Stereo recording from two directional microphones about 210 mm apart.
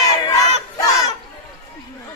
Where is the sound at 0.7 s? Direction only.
15° left (ahead or behind).